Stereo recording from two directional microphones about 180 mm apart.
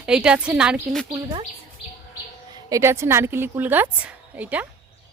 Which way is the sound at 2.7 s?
15° right (ahead or behind).